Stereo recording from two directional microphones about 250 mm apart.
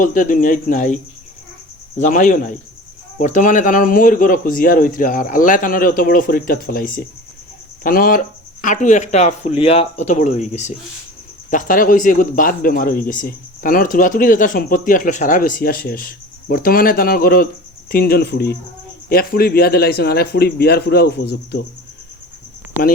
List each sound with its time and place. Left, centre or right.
0.0 s speech: left
2.0 s speech: left